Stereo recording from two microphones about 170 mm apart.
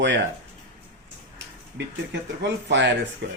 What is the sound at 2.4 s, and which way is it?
Speech, 90° right.